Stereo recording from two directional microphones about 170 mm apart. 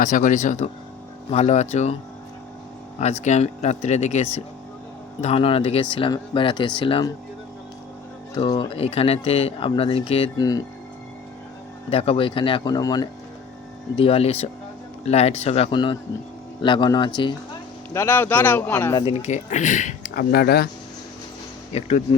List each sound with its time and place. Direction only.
0.0 s speech: 50° left (ahead or behind)
3.0 s speech: 40° left (ahead or behind)
8.4 s speech: 30° left (ahead or behind)
10.3 s speech: 20° left (ahead or behind)
11.9 s speech: 35° left (ahead or behind)
13.9 s speech: 35° left (ahead or behind)
17.9 s speech: 10° left (ahead or behind)
18.9 s speech: 35° left (ahead or behind); by 20.7 s 65° left (ahead or behind)
21.7 s speech: 40° left (ahead or behind)